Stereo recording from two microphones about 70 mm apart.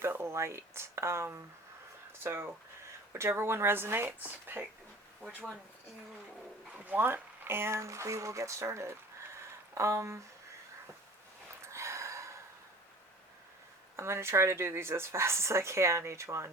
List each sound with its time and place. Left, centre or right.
0.0 s speech: right
6.7 s speech: right
11.6 s gasp: right
13.9 s speech: right